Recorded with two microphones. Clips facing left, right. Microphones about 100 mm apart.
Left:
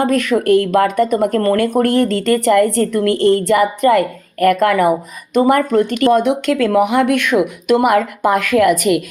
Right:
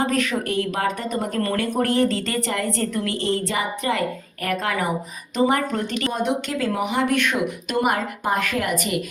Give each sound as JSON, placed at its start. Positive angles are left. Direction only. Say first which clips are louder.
{"t": 0.0, "sound": "speech", "louder": "left 8 dB", "side_deg": 50}
{"t": 1.4, "sound": "speech", "louder": "left 7 dB", "side_deg": 40}
{"t": 1.6, "sound": "speech", "louder": "left 6 dB", "side_deg": 55}
{"t": 6.1, "sound": "a woman's voice", "louder": "left 9 dB", "side_deg": 75}